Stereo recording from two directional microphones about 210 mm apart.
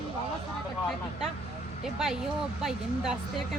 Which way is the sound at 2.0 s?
Centre (ahead or behind).